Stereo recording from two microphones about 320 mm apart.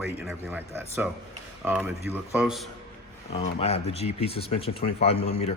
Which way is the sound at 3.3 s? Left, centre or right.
Centre.